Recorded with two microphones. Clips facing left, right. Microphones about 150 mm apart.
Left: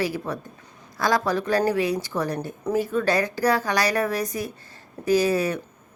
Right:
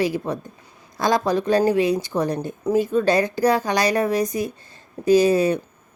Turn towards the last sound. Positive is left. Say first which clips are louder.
# right 5 dB
turn(degrees=-20)  # may be behind; listen again after turning